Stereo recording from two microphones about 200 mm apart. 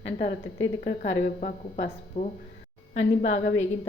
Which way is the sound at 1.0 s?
40° left (ahead or behind).